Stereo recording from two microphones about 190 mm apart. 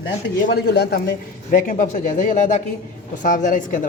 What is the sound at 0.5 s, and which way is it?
Speech, 55° left (ahead or behind).